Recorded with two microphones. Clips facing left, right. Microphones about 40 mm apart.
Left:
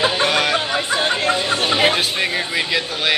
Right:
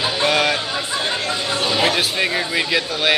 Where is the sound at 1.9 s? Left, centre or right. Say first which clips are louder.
Even; centre.